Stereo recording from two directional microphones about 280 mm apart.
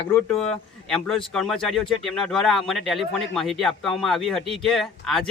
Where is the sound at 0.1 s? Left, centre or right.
Centre.